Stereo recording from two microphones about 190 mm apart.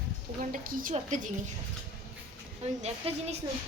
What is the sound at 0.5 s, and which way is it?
Speech, 45° right (ahead or behind).